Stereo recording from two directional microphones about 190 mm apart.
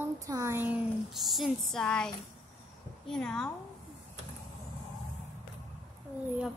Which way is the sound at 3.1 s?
5° left (ahead or behind).